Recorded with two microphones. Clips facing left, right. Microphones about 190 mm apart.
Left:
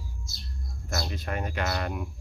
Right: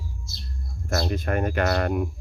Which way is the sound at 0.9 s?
55° right (ahead or behind).